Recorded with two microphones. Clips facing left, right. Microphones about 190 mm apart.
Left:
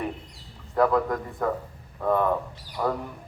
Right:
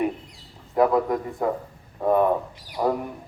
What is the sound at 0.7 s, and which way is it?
A man's voice, 20° right (ahead or behind).